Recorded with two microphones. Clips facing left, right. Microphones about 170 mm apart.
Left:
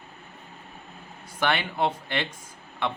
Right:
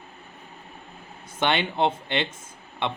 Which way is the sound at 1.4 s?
25° right (ahead or behind).